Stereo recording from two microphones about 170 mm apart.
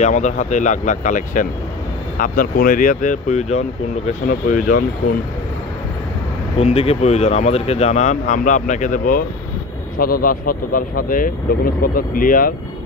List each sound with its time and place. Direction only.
0.0 s speech: 45° left (ahead or behind)
4.3 s speech: 55° left (ahead or behind)
6.6 s speech: 35° left (ahead or behind); by 12.5 s 55° left (ahead or behind)